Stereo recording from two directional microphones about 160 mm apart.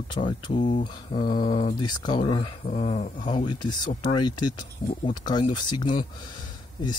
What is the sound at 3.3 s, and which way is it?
Speech, 30° left (ahead or behind).